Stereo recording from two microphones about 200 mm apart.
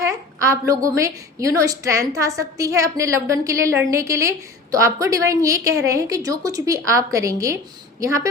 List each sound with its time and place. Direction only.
0.0 s a woman's voice: 15° right (ahead or behind)